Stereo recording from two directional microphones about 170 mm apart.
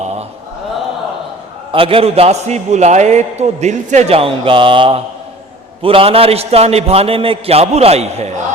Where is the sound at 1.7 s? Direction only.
35° right (ahead or behind).